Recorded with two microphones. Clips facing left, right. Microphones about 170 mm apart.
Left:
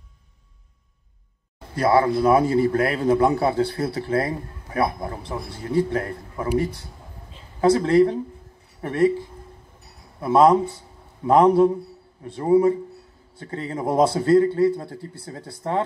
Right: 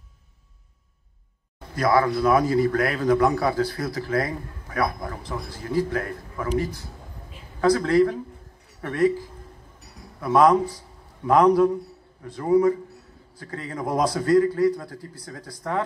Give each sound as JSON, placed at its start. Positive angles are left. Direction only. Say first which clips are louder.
{"t": 1.8, "sound": "a man's voice", "louder": "left 2 dB", "side_deg": 30}